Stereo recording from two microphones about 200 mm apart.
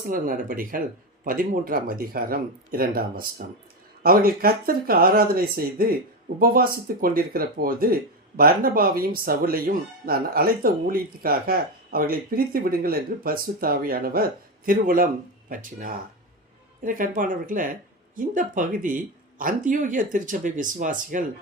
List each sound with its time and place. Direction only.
0.1 s speech: 45° right (ahead or behind)